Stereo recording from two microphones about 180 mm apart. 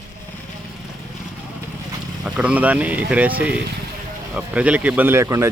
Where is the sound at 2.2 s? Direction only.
5° right (ahead or behind).